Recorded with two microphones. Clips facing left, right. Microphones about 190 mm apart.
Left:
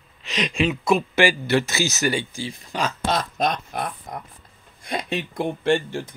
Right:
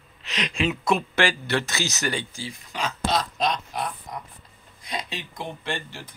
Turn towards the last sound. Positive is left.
turn(degrees=50)  # may be behind; listen again after turning